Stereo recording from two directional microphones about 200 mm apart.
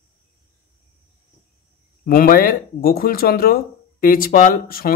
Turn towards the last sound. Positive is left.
turn(degrees=45)  # may be behind; listen again after turning